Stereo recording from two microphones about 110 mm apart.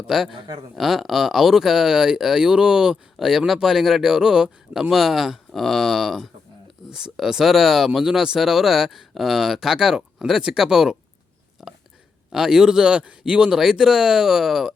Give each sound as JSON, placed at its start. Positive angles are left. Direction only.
{"t": 0.1, "sound": "speech", "side_deg": 0}
{"t": 0.3, "sound": "speech", "side_deg": -40}
{"t": 0.8, "sound": "speech", "side_deg": 0}
{"t": 11.6, "sound": "a sound", "side_deg": -5}
{"t": 12.3, "sound": "speech", "side_deg": -5}